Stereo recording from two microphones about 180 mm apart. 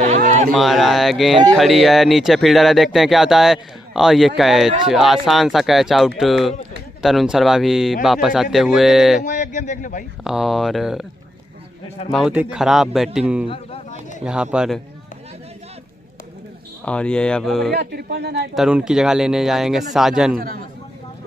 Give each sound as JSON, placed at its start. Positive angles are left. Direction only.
{"t": 0.0, "sound": "a sound", "side_deg": -45}
{"t": 0.5, "sound": "speech", "side_deg": 0}
{"t": 9.2, "sound": "speech", "side_deg": 45}
{"t": 10.2, "sound": "speech", "side_deg": 0}
{"t": 12.1, "sound": "speech", "side_deg": -5}
{"t": 16.8, "sound": "speech", "side_deg": 5}
{"t": 17.7, "sound": "speech", "side_deg": -65}
{"t": 18.5, "sound": "speech", "side_deg": -5}
{"t": 20.3, "sound": "speech", "side_deg": -55}